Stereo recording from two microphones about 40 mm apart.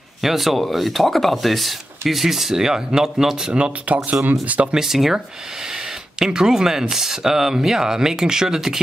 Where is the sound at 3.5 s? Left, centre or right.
Right.